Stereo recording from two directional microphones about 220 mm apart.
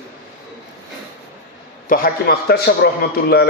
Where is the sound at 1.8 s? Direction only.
40° left (ahead or behind).